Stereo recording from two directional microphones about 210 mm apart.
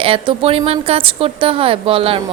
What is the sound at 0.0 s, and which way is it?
Speech, 25° right (ahead or behind).